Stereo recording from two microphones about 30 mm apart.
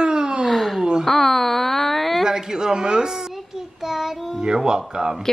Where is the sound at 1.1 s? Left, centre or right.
Centre.